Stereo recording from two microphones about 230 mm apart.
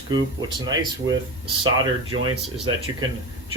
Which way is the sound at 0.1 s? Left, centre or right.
Centre.